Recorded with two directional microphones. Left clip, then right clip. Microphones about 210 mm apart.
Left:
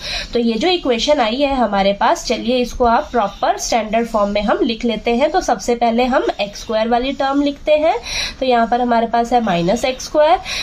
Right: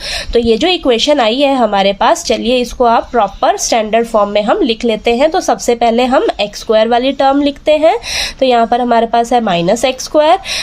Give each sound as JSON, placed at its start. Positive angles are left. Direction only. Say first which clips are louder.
{"t": 0.3, "sound": "a woman's voice", "louder": "right 6 dB", "side_deg": -45}